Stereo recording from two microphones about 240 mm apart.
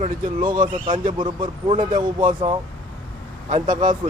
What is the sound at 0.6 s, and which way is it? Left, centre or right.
A man's voice, right.